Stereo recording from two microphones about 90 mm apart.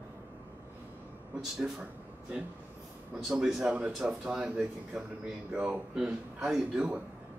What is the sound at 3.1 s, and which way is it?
A man's voice, 5° right (ahead or behind).